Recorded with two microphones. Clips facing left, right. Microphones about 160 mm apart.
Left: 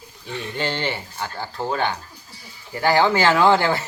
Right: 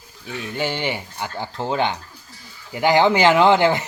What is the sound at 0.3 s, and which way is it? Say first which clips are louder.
Speech: right 1 dB; 10° right (ahead or behind).